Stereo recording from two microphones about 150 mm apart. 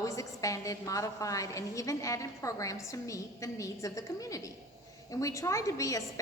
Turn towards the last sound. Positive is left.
turn(degrees=20)  # may be behind; listen again after turning